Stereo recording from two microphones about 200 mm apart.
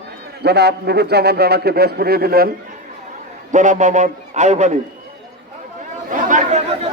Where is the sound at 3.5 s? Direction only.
40° right (ahead or behind).